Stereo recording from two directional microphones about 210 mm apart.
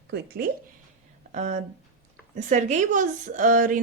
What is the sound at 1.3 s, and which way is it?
A woman's voice, 35° right (ahead or behind).